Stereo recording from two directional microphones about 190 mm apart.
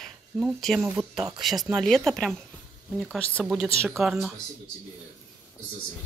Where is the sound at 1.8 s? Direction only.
Centre (ahead or behind).